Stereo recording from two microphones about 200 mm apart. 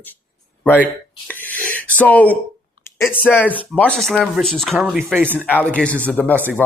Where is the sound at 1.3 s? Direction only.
10° left (ahead or behind).